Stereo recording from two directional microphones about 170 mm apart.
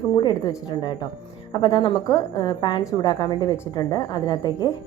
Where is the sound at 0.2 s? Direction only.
25° left (ahead or behind).